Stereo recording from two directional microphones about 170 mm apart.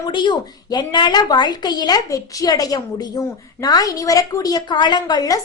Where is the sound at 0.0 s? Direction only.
25° left (ahead or behind).